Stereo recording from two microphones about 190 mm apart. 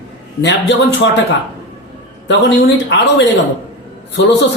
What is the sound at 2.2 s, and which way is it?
Speech, 65° left (ahead or behind).